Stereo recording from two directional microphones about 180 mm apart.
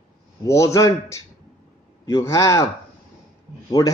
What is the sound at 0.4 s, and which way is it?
A man's voice, 15° left (ahead or behind).